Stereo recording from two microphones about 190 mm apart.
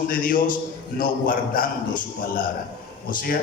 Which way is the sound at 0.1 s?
45° left (ahead or behind).